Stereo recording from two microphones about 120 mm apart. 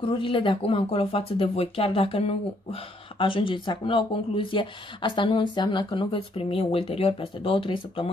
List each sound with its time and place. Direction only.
0.0 s speech: 45° left (ahead or behind)